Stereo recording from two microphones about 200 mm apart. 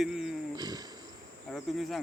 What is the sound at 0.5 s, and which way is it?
Speech, 20° right (ahead or behind).